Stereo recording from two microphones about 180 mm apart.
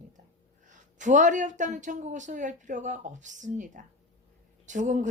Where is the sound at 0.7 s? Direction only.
45° right (ahead or behind).